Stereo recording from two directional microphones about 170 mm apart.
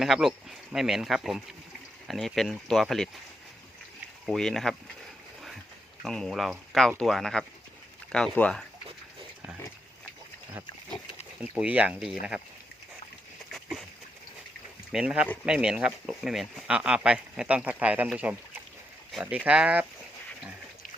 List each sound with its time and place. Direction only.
0.0 s speech: centre (ahead or behind)
4.3 s speech: 5° left (ahead or behind)
6.0 s speech: centre (ahead or behind)
11.3 s speech: 10° right (ahead or behind)
13.5 s a sound: centre (ahead or behind)
14.9 s speech: 5° right (ahead or behind)